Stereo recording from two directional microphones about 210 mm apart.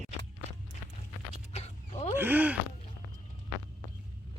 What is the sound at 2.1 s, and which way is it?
Speech, 10° right (ahead or behind).